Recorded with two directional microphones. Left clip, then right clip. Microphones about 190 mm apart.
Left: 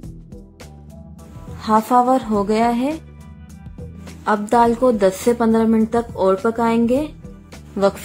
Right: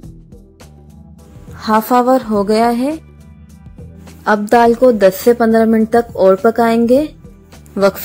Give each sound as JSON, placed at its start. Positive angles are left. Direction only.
{"t": 1.6, "sound": "a woman's voice", "side_deg": -25}
{"t": 4.2, "sound": "a woman's voice", "side_deg": -30}